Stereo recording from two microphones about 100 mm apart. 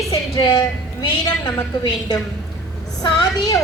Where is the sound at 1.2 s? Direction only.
40° left (ahead or behind).